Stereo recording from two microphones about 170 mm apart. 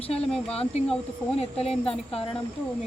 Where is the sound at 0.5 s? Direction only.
35° left (ahead or behind).